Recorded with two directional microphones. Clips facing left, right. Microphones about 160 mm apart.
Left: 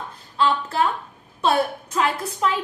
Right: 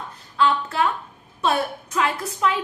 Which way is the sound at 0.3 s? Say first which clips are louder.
Even; 30° left (ahead or behind).